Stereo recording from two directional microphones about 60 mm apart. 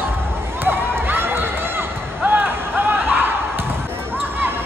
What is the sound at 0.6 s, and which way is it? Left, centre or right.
Run, right.